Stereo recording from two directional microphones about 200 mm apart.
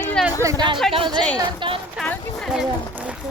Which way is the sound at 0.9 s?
25° right (ahead or behind).